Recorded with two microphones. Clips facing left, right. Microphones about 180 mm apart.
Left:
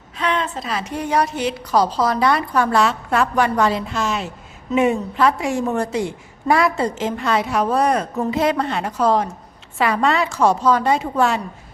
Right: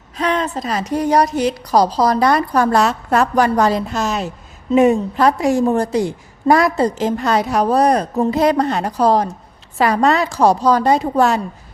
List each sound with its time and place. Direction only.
0.2 s a woman's voice: 40° right (ahead or behind)